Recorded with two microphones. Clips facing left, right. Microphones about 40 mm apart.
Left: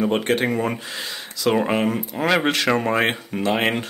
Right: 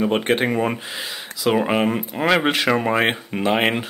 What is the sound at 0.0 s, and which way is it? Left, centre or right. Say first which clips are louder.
Speech: right 1 dB; centre.